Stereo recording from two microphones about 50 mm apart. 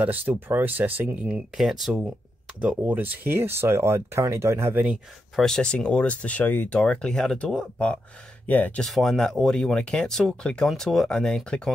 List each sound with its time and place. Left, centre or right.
0.0 s speech: right
1.1 s speech: right
1.6 s speech: centre
2.8 s speech: right
3.3 s speech: right
5.4 s speech: centre
6.5 s speech: left
6.8 s speech: left
8.5 s speech: left
8.8 s speech: centre